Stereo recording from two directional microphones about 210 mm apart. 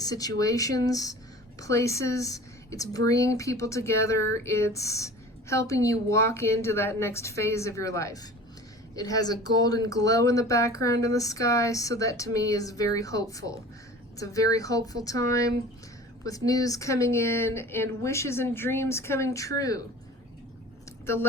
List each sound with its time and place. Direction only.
0.0 s speech: 15° left (ahead or behind)